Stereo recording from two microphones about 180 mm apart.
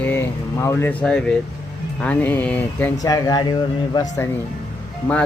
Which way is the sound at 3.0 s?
20° left (ahead or behind).